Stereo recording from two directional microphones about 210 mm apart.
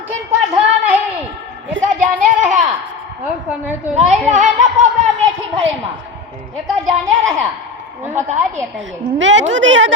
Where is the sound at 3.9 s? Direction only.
35° right (ahead or behind).